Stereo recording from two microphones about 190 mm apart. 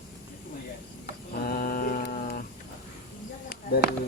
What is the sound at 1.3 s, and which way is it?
Mantra, 50° left (ahead or behind).